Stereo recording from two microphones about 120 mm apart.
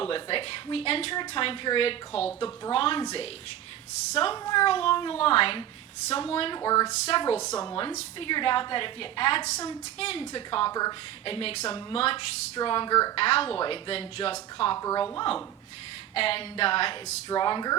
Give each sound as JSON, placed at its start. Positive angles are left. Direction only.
{"t": 0.0, "sound": "a woman's voice", "side_deg": 50}
{"t": 4.1, "sound": "a woman's voice", "side_deg": 50}
{"t": 6.6, "sound": "a woman's voice", "side_deg": 30}
{"t": 7.1, "sound": "a woman's voice", "side_deg": 50}
{"t": 7.5, "sound": "a woman's voice", "side_deg": 30}
{"t": 8.2, "sound": "a woman's voice", "side_deg": 45}
{"t": 9.4, "sound": "a woman's voice", "side_deg": 30}
{"t": 10.0, "sound": "a woman's voice", "side_deg": 50}
{"t": 10.7, "sound": "a woman's voice", "side_deg": 30}
{"t": 11.3, "sound": "a woman's voice", "side_deg": 50}
{"t": 13.1, "sound": "a woman's voice", "side_deg": 50}
{"t": 14.8, "sound": "a woman's voice", "side_deg": 25}
{"t": 16.1, "sound": "a woman's voice", "side_deg": 50}
{"t": 17.2, "sound": "a woman's voice", "side_deg": 40}